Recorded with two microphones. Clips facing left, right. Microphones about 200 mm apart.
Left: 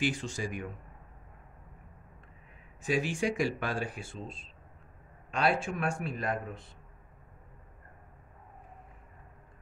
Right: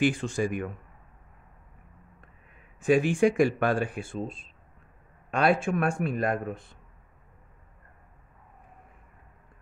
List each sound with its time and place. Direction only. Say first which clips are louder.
0.0 s speech: right 7 dB; 55° right (ahead or behind)
2.8 s speech: right 9 dB; 55° right (ahead or behind)